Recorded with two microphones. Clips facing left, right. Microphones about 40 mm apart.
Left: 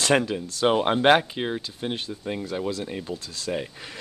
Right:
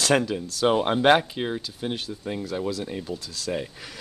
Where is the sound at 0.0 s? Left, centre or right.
Centre.